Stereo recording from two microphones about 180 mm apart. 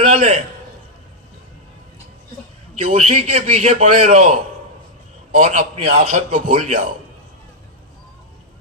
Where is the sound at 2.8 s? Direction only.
45° right (ahead or behind).